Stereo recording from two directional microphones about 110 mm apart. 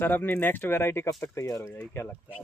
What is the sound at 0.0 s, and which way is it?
Speech, 20° left (ahead or behind).